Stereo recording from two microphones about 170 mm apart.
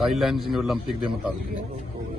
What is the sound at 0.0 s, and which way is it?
Speech, centre (ahead or behind).